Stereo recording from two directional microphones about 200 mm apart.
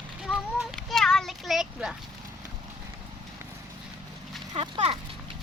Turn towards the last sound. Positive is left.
turn(degrees=-25)  # may be behind; listen again after turning